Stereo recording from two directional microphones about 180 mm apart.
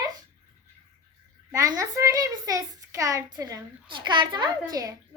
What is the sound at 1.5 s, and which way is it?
A child's voice, 20° right (ahead or behind).